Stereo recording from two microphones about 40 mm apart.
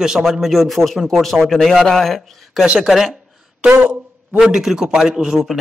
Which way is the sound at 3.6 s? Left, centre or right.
Right.